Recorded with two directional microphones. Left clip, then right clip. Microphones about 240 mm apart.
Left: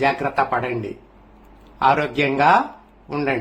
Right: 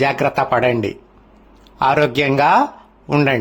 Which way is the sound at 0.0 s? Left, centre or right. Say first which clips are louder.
Right 3 dB; right.